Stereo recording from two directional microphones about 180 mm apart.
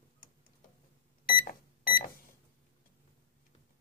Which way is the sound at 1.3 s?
50° left (ahead or behind).